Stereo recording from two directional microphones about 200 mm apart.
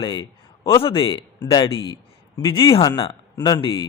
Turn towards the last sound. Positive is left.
turn(degrees=20)  # may be behind; listen again after turning